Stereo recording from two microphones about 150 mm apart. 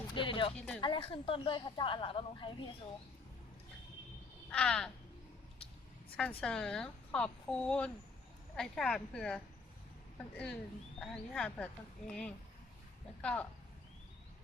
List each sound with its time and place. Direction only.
0.1 s speech: 35° left (ahead or behind)
0.5 s speech: 5° left (ahead or behind)
0.8 s speech: 35° left (ahead or behind)
4.5 s speech: 5° left (ahead or behind)
6.1 s speech: 5° left (ahead or behind)